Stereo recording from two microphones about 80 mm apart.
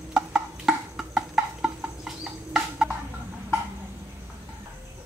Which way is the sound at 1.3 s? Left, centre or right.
Centre.